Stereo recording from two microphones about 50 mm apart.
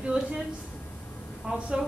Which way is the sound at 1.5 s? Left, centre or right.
Centre.